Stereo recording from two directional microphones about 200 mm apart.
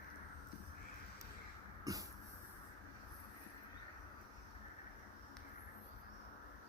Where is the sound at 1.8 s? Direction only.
15° right (ahead or behind).